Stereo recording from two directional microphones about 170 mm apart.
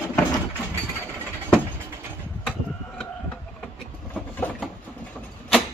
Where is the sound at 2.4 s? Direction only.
5° left (ahead or behind).